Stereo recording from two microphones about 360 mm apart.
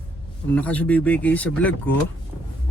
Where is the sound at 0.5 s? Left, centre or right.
Centre.